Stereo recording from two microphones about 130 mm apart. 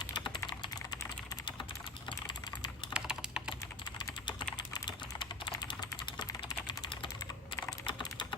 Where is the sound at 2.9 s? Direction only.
5° right (ahead or behind).